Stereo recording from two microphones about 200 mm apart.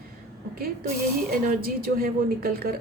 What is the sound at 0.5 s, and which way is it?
A woman's voice, 50° right (ahead or behind).